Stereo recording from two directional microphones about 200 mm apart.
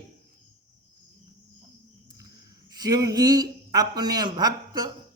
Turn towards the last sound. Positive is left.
turn(degrees=-20)  # may be behind; listen again after turning